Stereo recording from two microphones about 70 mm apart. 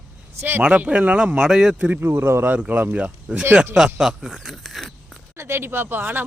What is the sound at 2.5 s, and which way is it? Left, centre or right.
Speech, right.